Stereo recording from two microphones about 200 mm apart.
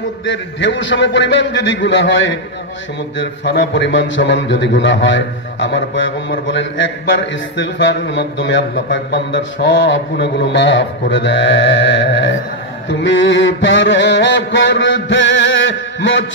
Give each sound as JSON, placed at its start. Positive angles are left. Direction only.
{"t": 0.2, "sound": "a man's voice", "side_deg": 65}
{"t": 3.4, "sound": "a man's voice", "side_deg": 60}
{"t": 13.0, "sound": "mantra", "side_deg": 70}